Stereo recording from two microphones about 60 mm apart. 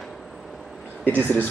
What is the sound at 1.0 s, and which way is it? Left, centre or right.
Speech, left.